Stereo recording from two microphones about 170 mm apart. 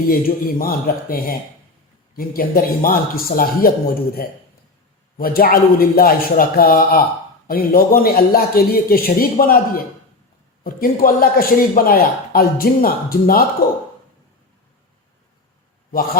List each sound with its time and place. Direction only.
0.1 s a man's voice: 60° left (ahead or behind)